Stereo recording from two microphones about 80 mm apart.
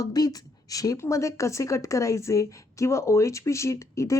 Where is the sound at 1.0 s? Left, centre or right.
Left.